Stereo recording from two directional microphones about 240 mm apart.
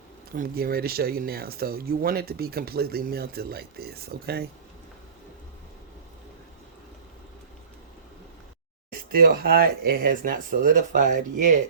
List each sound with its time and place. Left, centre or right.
0.3 s speech: right
8.9 s speech: right